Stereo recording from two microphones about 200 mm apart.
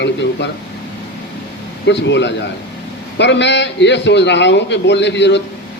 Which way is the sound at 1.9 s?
60° left (ahead or behind).